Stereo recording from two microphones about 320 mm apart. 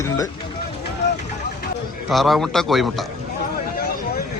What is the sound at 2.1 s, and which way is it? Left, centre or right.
A man's voice, centre.